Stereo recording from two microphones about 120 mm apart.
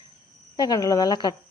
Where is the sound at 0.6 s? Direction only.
30° left (ahead or behind).